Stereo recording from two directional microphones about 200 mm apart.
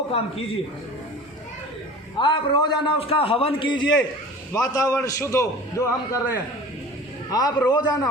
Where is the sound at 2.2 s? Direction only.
25° left (ahead or behind).